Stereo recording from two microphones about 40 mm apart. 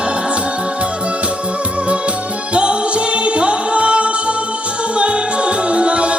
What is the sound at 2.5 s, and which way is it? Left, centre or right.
Music, right.